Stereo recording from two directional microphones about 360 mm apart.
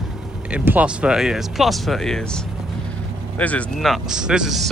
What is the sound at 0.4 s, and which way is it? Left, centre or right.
Speech, centre.